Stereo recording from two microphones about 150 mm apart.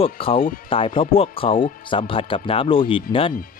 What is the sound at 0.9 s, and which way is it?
Speech, 40° left (ahead or behind).